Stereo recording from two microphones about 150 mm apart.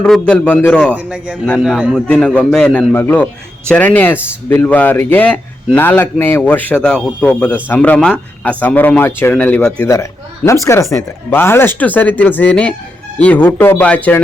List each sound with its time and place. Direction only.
0.0 s speech: 5° left (ahead or behind)
0.9 s a man's voice: 10° right (ahead or behind)
2.0 s speech: 5° left (ahead or behind)
9.9 s speech: 20° left (ahead or behind)